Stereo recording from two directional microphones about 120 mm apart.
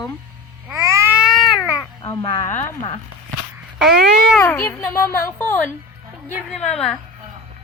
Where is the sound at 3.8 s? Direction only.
Centre (ahead or behind).